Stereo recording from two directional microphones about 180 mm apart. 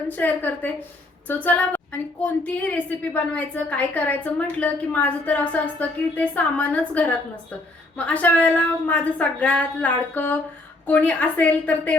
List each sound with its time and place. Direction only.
0.1 s a woman's voice: 10° left (ahead or behind)